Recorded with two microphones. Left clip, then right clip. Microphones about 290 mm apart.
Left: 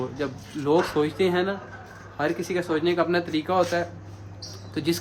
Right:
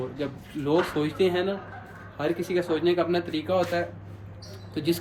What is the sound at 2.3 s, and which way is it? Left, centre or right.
Speech, left.